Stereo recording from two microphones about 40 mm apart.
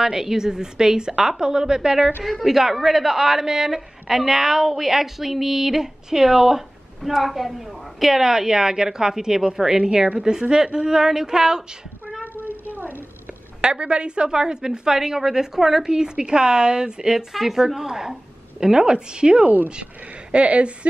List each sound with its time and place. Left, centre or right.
0.0 s a woman's voice: centre
13.6 s a woman's voice: right
17.3 s a woman's voice: centre; by 19.4 s right
19.4 s speech: right
19.7 s a woman's voice: right